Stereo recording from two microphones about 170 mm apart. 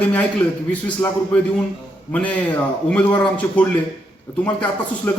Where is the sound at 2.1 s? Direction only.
10° left (ahead or behind).